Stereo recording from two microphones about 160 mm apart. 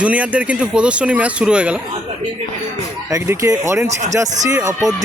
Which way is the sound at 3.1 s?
20° right (ahead or behind).